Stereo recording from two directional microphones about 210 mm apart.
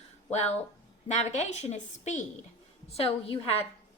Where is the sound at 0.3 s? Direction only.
30° left (ahead or behind).